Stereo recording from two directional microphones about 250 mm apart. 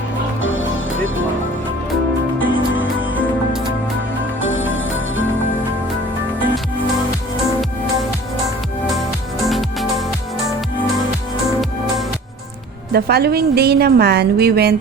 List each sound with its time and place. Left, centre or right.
0.4 s music: left
4.4 s music: left
9.4 s music: centre
12.9 s a woman's voice: right